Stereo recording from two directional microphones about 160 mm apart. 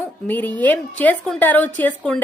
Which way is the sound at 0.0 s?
10° left (ahead or behind).